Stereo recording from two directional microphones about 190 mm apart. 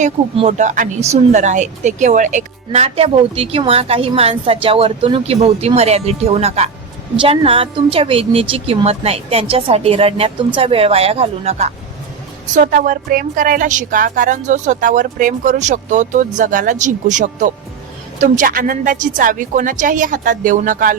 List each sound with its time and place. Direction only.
0.0 s speech: 40° right (ahead or behind)
12.5 s speech: 45° right (ahead or behind)